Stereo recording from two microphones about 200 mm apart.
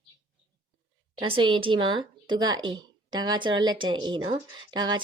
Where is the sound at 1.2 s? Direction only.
25° right (ahead or behind).